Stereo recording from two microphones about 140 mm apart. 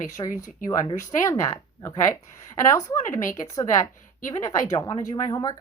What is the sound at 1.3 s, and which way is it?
Speech, 20° left (ahead or behind).